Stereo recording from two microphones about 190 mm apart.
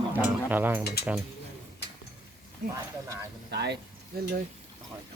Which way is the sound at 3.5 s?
60° right (ahead or behind).